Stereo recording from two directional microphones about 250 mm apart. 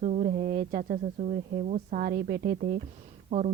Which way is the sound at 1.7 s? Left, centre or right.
Right.